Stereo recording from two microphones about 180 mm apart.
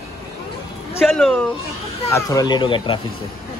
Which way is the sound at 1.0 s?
5° left (ahead or behind).